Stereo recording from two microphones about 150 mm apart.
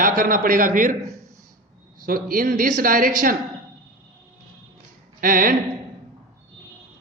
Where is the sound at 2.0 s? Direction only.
70° right (ahead or behind).